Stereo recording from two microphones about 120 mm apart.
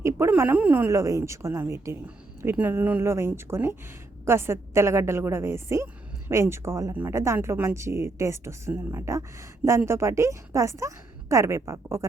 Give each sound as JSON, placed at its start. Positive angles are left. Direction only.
{"t": 0.0, "sound": "a woman's voice", "side_deg": -20}